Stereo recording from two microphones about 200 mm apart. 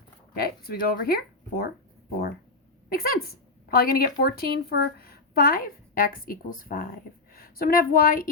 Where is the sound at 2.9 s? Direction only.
50° left (ahead or behind).